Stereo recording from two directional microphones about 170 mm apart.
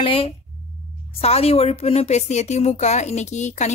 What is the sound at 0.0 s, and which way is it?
A woman's voice, 30° left (ahead or behind).